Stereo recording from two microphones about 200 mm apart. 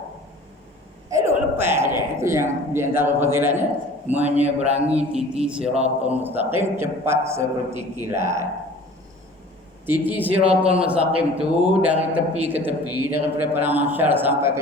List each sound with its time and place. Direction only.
1.1 s a man's voice: 15° right (ahead or behind)
5.6 s a man's voice: 30° right (ahead or behind)
6.1 s a man's voice: 10° right (ahead or behind)
10.1 s a man's voice: 10° right (ahead or behind)